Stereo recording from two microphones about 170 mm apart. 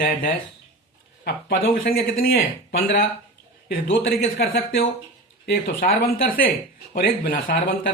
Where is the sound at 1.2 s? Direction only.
65° left (ahead or behind).